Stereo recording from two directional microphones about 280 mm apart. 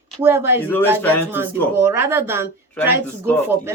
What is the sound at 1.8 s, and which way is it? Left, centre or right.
Speech, centre.